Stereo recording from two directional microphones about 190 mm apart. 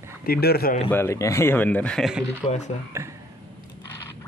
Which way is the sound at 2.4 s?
40° left (ahead or behind).